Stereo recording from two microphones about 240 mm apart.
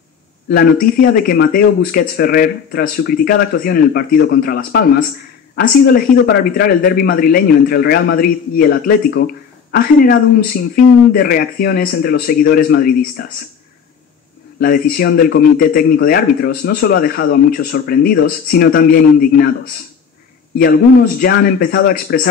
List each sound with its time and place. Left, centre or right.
0.5 s a man's voice: left
14.6 s a man's voice: left
21.2 s a man's voice: left